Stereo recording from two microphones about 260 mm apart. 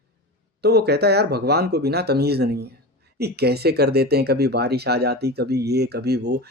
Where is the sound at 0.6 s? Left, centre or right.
Right.